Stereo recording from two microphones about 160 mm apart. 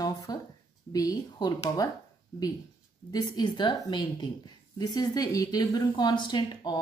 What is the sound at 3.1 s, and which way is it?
Speech, 25° left (ahead or behind).